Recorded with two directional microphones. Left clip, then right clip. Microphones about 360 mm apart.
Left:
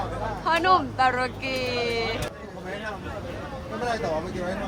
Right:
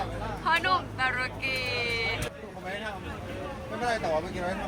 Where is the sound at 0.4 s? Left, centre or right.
Centre.